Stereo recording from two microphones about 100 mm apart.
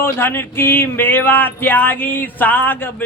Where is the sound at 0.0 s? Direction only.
25° left (ahead or behind).